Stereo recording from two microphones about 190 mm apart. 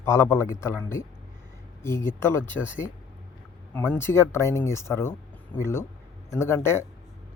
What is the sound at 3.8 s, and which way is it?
Speech, 10° left (ahead or behind).